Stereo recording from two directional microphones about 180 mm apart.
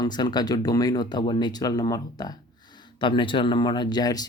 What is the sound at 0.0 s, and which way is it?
Speech, 25° left (ahead or behind).